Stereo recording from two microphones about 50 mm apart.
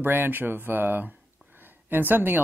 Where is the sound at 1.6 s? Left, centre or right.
Right.